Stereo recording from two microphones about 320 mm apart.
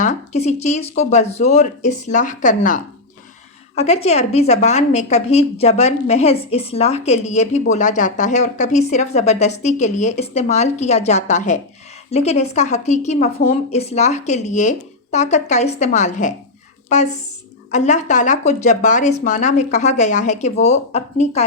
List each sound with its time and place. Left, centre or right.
0.0 s a woman's voice: left